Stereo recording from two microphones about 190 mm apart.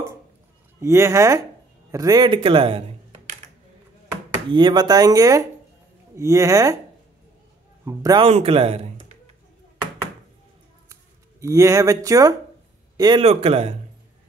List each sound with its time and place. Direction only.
0.7 s speech: 15° right (ahead or behind)
4.5 s speech: 25° right (ahead or behind)
7.8 s speech: 15° right (ahead or behind)
8.3 s a man's voice: 30° right (ahead or behind)
11.4 s a man's voice: 15° right (ahead or behind)
13.2 s speech: 30° right (ahead or behind)